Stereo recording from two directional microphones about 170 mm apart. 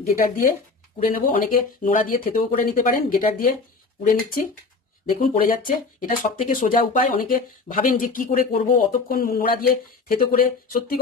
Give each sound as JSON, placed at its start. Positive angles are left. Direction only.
{"t": 0.1, "sound": "speech", "side_deg": 55}
{"t": 5.5, "sound": "speech", "side_deg": 55}